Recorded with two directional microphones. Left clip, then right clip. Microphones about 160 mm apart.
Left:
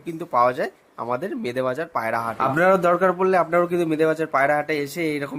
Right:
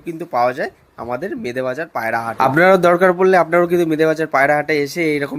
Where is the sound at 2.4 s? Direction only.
25° right (ahead or behind).